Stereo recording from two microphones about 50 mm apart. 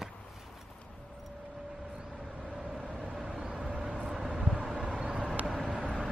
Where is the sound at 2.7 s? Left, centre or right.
Centre.